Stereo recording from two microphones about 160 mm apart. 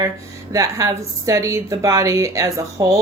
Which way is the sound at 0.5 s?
20° right (ahead or behind).